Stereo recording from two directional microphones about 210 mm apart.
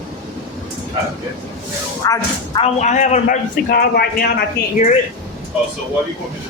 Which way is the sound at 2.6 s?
35° left (ahead or behind).